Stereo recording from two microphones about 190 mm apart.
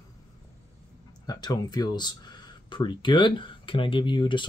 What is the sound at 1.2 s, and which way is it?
Speech, 20° left (ahead or behind).